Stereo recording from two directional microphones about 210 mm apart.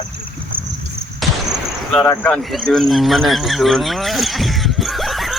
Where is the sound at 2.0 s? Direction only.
15° left (ahead or behind).